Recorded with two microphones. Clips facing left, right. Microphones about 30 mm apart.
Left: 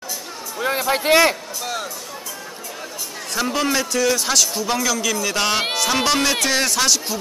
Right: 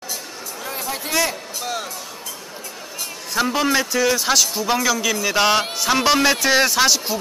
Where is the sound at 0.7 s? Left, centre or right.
Left.